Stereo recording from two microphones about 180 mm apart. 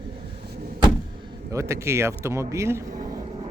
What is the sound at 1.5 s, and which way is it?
A man's voice, 15° right (ahead or behind).